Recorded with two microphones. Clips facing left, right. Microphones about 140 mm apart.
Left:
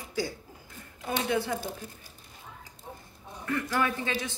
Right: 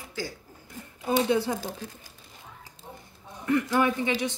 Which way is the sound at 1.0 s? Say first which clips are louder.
Right 5 dB; 25° right (ahead or behind).